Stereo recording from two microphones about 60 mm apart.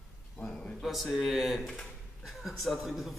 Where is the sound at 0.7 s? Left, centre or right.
Centre.